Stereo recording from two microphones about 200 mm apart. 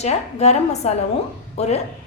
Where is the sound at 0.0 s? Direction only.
35° left (ahead or behind).